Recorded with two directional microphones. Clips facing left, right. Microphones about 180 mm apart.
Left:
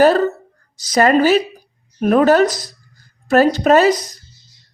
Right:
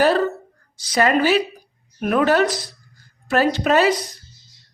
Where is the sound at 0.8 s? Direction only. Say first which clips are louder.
Left 5 dB; 40° left (ahead or behind).